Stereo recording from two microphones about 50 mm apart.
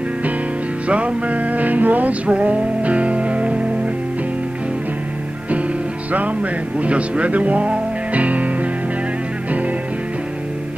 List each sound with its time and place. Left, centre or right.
0.8 s music: right
6.8 s speech: right